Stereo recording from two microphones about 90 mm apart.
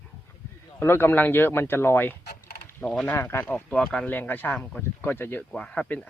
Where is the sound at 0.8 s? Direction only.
25° left (ahead or behind).